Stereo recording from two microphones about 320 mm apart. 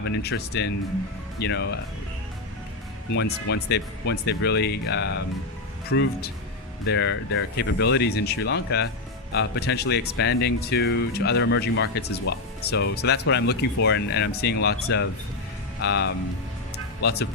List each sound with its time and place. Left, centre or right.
0.2 s speech: left
3.2 s speech: left
15.8 s speech: left